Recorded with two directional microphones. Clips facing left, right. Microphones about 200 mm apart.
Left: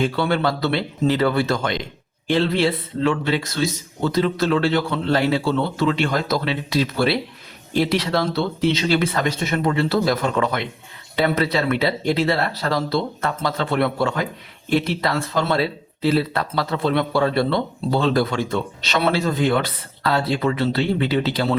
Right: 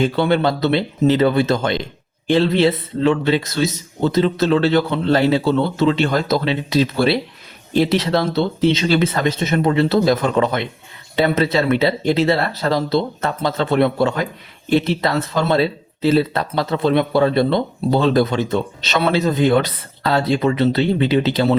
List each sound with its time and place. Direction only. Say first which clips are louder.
0.0 s speech: right 4 dB; 20° right (ahead or behind)